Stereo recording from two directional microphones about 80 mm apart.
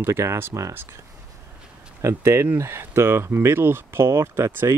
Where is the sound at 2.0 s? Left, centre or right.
Right.